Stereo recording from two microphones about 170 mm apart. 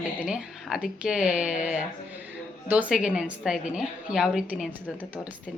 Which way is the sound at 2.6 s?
5° right (ahead or behind).